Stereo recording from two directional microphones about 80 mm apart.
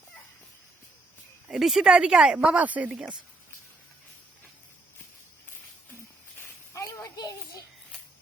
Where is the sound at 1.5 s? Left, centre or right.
Centre.